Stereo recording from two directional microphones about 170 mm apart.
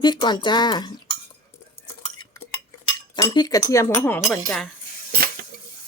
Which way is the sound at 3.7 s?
20° left (ahead or behind).